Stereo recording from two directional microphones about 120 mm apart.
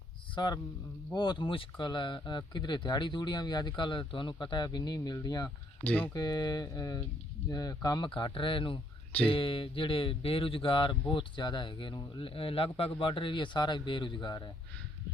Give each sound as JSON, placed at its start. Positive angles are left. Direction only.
{"t": 0.3, "sound": "speech", "side_deg": 35}
{"t": 5.8, "sound": "speech", "side_deg": 15}
{"t": 6.1, "sound": "speech", "side_deg": 35}